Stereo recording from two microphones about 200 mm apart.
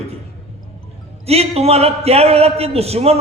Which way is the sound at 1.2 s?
30° right (ahead or behind).